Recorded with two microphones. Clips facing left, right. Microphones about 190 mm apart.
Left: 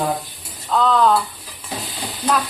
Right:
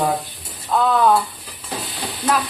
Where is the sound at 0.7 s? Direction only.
10° right (ahead or behind).